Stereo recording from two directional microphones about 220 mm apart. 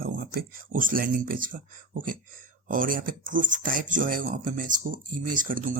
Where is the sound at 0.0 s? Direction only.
40° right (ahead or behind).